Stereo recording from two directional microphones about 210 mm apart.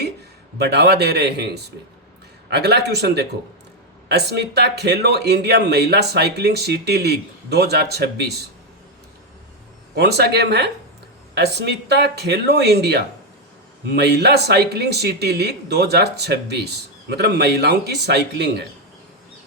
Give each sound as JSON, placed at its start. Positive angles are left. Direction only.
{"t": 0.6, "sound": "speech", "side_deg": -50}
{"t": 9.9, "sound": "speech", "side_deg": -50}